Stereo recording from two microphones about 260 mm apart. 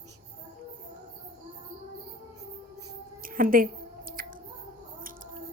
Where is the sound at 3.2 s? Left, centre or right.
Right.